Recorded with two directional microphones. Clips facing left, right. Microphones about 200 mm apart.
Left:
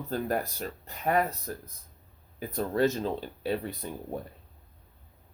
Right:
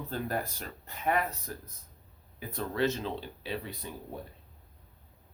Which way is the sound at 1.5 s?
40° left (ahead or behind).